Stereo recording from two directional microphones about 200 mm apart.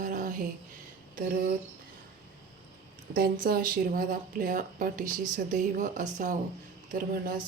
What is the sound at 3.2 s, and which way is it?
Speech, 50° right (ahead or behind).